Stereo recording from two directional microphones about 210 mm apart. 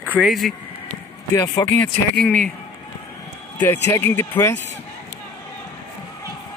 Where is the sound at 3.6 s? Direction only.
15° left (ahead or behind).